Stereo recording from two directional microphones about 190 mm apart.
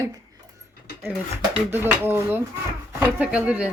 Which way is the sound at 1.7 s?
10° right (ahead or behind).